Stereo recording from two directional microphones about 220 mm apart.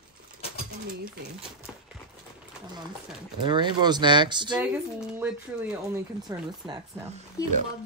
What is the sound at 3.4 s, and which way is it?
Speech, 20° right (ahead or behind).